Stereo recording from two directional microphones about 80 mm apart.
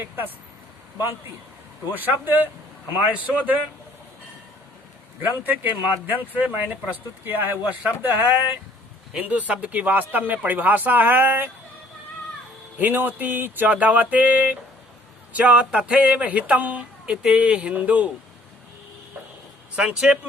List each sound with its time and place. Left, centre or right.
1.9 s speech: right
5.2 s speech: right
5.7 s speech: left
6.3 s speech: centre
9.1 s speech: centre
12.8 s speech: right
19.7 s speech: centre